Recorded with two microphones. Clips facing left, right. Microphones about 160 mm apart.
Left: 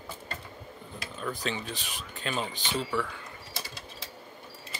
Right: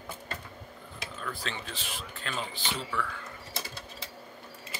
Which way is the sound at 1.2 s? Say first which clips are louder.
Left 5 dB; 20° left (ahead or behind).